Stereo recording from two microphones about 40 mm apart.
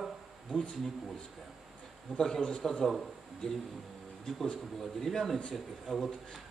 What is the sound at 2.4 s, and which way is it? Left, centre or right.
Speech, centre.